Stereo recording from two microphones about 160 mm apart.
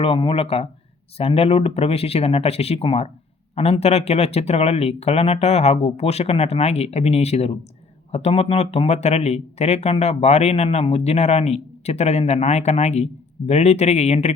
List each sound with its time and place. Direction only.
0.0 s speech: 35° left (ahead or behind)